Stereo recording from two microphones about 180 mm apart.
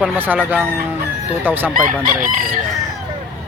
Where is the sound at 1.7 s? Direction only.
50° right (ahead or behind).